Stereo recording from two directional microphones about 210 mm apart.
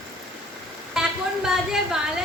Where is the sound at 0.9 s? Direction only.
5° right (ahead or behind).